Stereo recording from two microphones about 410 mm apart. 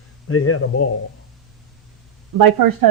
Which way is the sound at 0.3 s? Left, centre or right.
Left.